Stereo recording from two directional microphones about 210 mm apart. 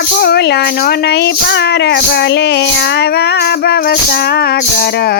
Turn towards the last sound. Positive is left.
turn(degrees=50)  # may be behind; listen again after turning